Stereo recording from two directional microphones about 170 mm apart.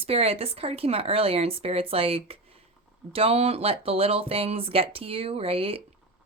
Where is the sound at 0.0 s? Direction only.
35° right (ahead or behind).